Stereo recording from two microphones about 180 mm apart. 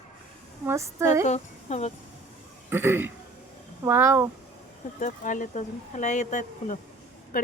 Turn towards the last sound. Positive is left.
turn(degrees=50)  # may be behind; listen again after turning